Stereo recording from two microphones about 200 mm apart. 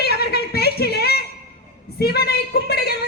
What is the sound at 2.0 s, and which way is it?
Speech, 50° left (ahead or behind).